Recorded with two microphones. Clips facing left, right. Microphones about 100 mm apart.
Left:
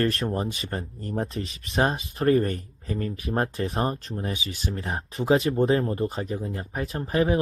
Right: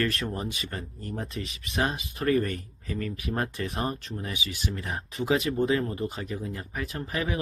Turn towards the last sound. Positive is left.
turn(degrees=35)  # may be behind; listen again after turning